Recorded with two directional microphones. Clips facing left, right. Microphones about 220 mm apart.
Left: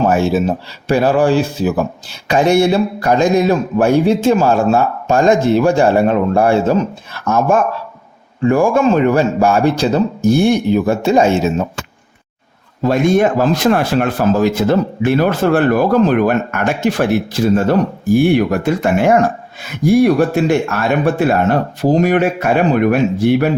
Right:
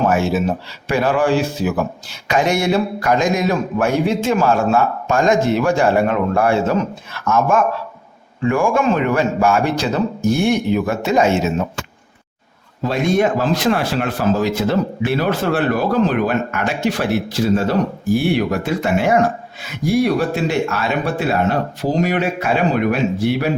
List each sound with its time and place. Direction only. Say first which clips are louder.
0.1 s speech: left 3 dB; 35° left (ahead or behind)
12.9 s speech: left 4 dB; 50° left (ahead or behind)